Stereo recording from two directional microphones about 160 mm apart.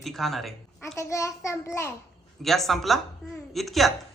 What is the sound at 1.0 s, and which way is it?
Speech, 20° left (ahead or behind).